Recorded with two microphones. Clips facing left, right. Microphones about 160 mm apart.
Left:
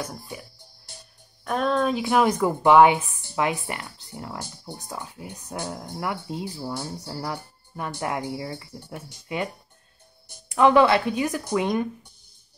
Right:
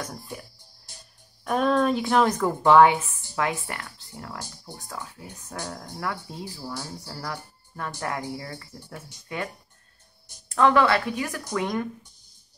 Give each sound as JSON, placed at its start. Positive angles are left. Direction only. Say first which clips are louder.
{"t": 0.0, "sound": "music", "louder": "left 1 dB", "side_deg": 5}
{"t": 1.4, "sound": "a woman's voice", "louder": "right 1 dB", "side_deg": 0}
{"t": 10.5, "sound": "speech", "louder": "left 3 dB", "side_deg": 15}